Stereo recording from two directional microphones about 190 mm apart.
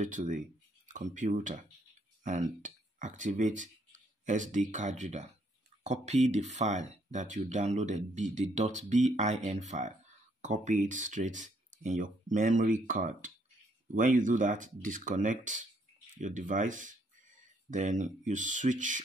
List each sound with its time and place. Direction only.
0.0 s speech: 45° right (ahead or behind)